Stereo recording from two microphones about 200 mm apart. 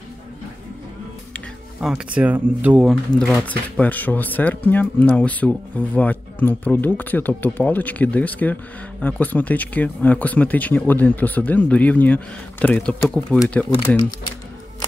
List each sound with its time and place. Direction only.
1.3 s speech: centre (ahead or behind)